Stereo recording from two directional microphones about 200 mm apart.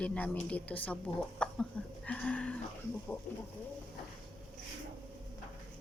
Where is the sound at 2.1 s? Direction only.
5° left (ahead or behind).